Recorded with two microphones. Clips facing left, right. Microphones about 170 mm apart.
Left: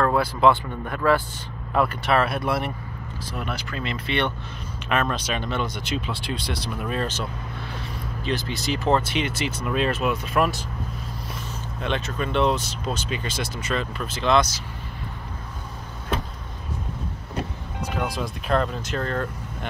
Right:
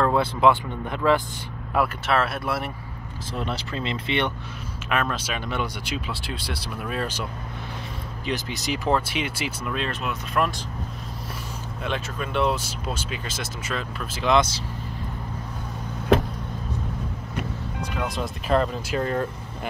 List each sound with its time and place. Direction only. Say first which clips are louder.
0.0 s speech: even; 20° right (ahead or behind)
1.7 s speech: left 1 dB; 5° right (ahead or behind)
3.3 s speech: right 2 dB; 25° right (ahead or behind)
4.8 s speech: left 2 dB; 5° right (ahead or behind)
8.3 s speech: left 1 dB; 15° right (ahead or behind)
9.7 s speech: left 7 dB; 5° left (ahead or behind)
11.8 s speech: left 3 dB; 5° right (ahead or behind)
14.3 s speech: even; 25° right (ahead or behind)
17.9 s speech: left 1 dB; centre (ahead or behind)